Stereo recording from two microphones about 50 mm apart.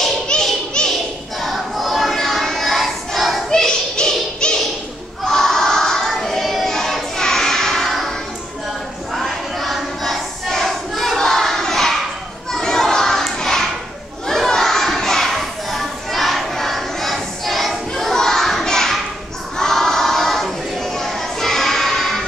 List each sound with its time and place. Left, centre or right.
0.3 s music: centre
0.8 s a sound: centre
1.4 s choir: centre
3.4 s music: centre
9.1 s a sound: centre
12.5 s crowd: centre
14.2 s children playing: centre
19.5 s choir: centre